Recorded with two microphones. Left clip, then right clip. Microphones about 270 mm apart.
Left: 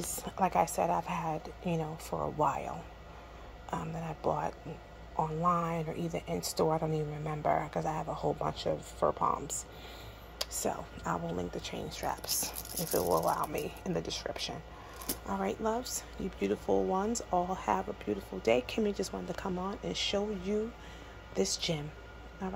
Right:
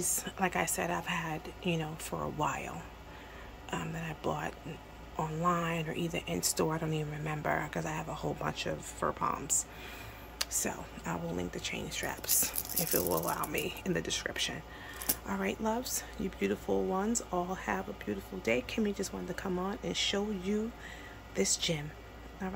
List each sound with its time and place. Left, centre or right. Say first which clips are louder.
0.1 s speech: left 5 dB; centre
3.9 s speech: left 5 dB; centre
5.1 s speech: left 2 dB; centre
10.4 s speech: left 1 dB; centre
15.4 s speech: even; centre